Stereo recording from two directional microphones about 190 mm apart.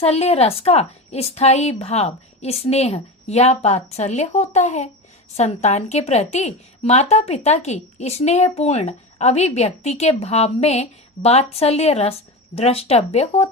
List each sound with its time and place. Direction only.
0.0 s a woman's voice: 35° left (ahead or behind)